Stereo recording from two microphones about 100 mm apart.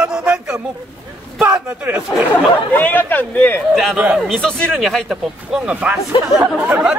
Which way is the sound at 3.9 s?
10° right (ahead or behind).